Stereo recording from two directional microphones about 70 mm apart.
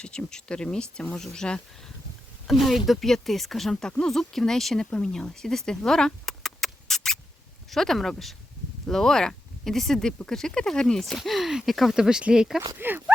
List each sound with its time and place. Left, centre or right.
0.0 s speech: centre
2.5 s speech: centre
4.9 s a sound: centre
7.7 s speech: centre
12.8 s speech: right